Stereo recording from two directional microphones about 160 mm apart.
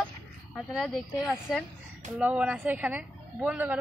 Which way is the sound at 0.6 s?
Centre (ahead or behind).